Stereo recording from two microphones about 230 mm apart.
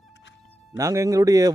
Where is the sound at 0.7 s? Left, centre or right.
Centre.